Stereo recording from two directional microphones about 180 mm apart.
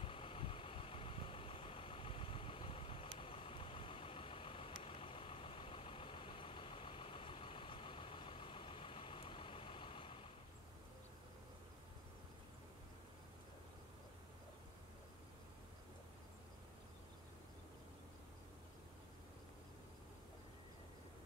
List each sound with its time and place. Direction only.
0.0 s vehicle: 30° left (ahead or behind)